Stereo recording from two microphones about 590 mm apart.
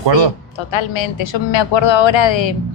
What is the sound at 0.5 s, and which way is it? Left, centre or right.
A woman's voice, left.